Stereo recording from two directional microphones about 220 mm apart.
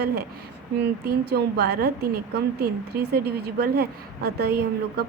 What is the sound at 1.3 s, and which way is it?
A woman's voice, 45° right (ahead or behind).